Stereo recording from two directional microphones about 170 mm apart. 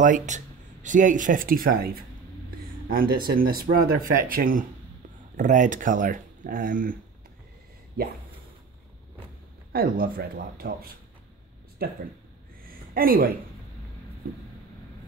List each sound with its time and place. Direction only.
0.0 s speech: 50° right (ahead or behind)
9.7 s speech: 60° right (ahead or behind)
12.6 s a sound: 60° right (ahead or behind)